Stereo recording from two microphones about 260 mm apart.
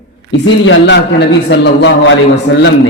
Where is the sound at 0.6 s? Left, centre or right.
Left.